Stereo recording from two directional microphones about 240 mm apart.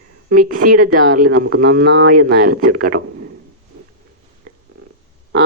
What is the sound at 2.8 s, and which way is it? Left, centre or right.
Speech, right.